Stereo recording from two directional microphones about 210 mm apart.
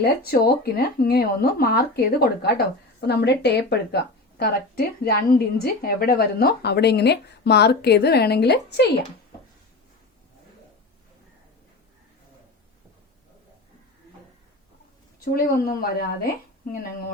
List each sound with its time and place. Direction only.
0.0 s a woman's voice: 45° left (ahead or behind)
15.2 s a woman's voice: 45° left (ahead or behind)